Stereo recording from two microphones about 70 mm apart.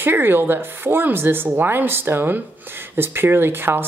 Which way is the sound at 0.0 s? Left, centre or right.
Right.